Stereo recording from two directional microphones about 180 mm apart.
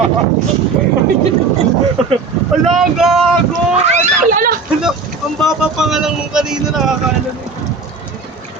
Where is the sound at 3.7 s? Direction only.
40° right (ahead or behind).